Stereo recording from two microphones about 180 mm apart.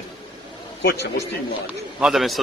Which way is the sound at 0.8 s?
65° left (ahead or behind).